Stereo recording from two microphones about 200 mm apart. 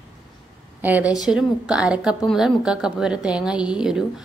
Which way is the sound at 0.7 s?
10° right (ahead or behind).